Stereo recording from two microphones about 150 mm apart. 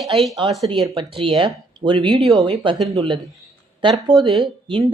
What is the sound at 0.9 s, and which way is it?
Speech, 35° right (ahead or behind).